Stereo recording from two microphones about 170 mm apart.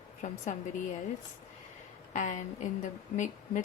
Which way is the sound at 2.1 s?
45° left (ahead or behind).